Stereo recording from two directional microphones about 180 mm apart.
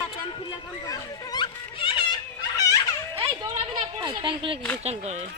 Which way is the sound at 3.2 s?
30° right (ahead or behind).